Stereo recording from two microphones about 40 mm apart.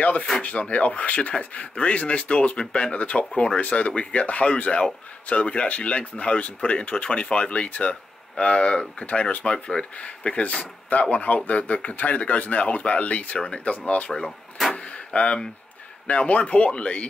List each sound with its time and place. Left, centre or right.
0.4 s speech: left
14.8 s door: left
16.1 s speech: left